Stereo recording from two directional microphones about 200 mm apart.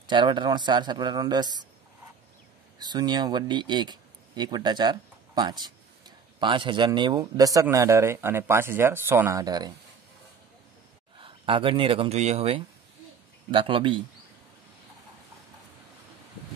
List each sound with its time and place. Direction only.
0.0 s speech: 20° right (ahead or behind)
2.8 s speech: 20° right (ahead or behind)
11.1 s speech: 25° right (ahead or behind)